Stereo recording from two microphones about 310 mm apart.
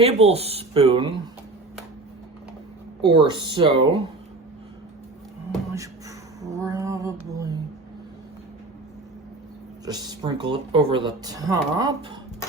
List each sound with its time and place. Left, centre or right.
0.0 s speech: centre
3.0 s speech: centre
6.4 s a sound: centre
9.8 s speech: centre